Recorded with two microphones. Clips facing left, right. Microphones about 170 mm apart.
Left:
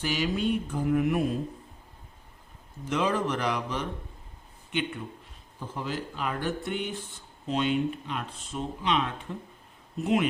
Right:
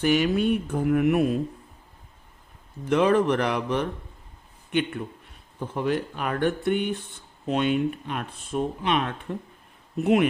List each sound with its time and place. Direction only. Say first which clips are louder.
0.0 s speech: right 6 dB; 55° right (ahead or behind)
2.8 s speech: right 7 dB; 60° right (ahead or behind)
5.5 s speech: right 8 dB; 60° right (ahead or behind)